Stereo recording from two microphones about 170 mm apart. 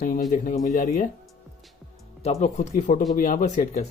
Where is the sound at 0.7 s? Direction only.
45° left (ahead or behind).